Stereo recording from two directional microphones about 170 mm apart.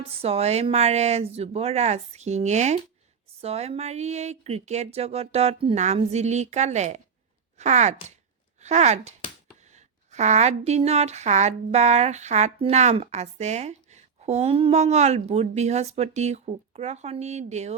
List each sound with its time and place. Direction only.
0.1 s speech: 35° right (ahead or behind)